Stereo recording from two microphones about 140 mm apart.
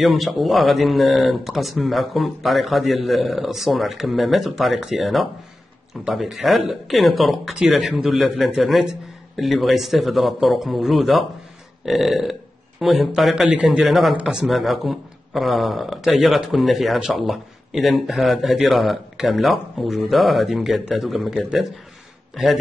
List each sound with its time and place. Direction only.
0.0 s a man's voice: centre (ahead or behind)